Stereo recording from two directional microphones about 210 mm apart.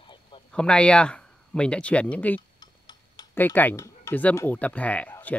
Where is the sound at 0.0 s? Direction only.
25° left (ahead or behind).